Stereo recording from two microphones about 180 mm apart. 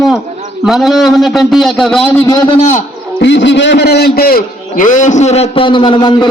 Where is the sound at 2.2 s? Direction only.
20° left (ahead or behind).